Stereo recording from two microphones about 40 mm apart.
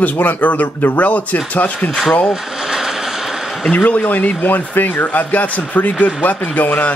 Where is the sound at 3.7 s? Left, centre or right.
Left.